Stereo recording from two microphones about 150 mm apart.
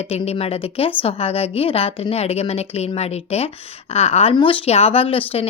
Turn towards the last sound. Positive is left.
turn(degrees=40)  # may be behind; listen again after turning